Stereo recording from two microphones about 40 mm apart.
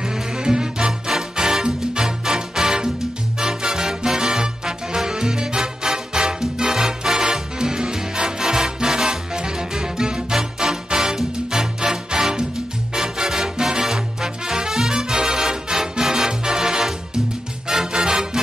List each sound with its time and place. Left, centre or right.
0.0 s music: centre